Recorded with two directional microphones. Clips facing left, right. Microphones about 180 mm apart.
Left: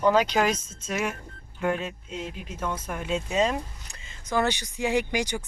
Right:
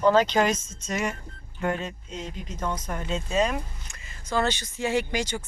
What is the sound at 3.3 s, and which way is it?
Speech, 25° left (ahead or behind).